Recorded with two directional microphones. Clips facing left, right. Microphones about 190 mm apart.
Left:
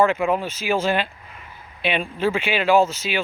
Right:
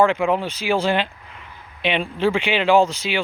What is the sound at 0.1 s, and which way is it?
Speech, 15° right (ahead or behind).